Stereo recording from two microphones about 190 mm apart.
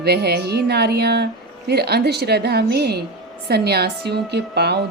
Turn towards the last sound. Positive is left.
turn(degrees=-60)  # may be behind; listen again after turning